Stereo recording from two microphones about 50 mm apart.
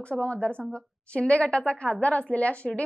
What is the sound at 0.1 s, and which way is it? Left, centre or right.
A woman's voice, left.